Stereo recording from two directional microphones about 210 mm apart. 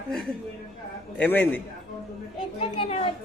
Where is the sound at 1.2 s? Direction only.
10° left (ahead or behind).